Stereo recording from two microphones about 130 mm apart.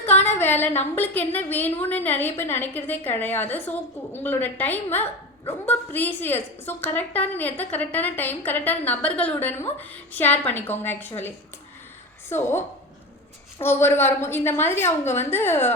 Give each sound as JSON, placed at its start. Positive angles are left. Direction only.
{"t": 0.0, "sound": "a sound", "side_deg": 15}
{"t": 0.9, "sound": "a woman's voice", "side_deg": 15}
{"t": 12.3, "sound": "a woman's voice", "side_deg": 20}